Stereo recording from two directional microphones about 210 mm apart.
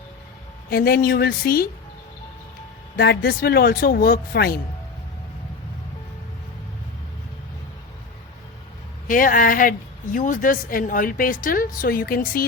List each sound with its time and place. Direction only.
0.7 s speech: 45° left (ahead or behind)
2.9 s speech: 50° left (ahead or behind)
9.0 s a woman's voice: 40° left (ahead or behind)